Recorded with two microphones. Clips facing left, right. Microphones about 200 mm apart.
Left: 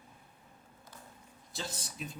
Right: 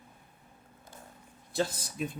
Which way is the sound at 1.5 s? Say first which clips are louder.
Right 10 dB; 55° right (ahead or behind).